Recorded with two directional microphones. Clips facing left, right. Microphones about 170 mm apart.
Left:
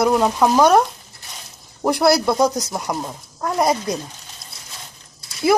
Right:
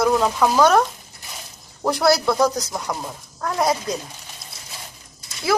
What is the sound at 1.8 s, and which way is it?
Speech, 15° left (ahead or behind).